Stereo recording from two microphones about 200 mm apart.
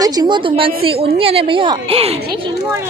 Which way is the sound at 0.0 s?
20° right (ahead or behind).